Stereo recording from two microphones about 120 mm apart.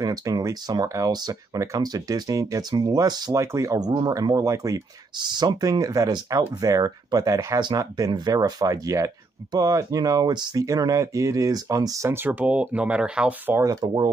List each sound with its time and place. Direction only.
0.0 s speech: 30° right (ahead or behind); by 13.6 s 10° right (ahead or behind)
13.6 s speech: 30° right (ahead or behind)